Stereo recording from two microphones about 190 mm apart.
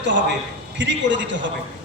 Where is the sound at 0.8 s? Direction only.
70° right (ahead or behind).